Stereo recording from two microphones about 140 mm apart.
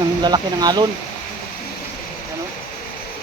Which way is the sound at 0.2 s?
30° right (ahead or behind).